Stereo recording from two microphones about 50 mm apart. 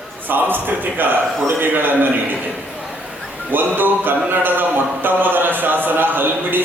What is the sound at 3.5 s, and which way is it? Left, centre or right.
Speech, right.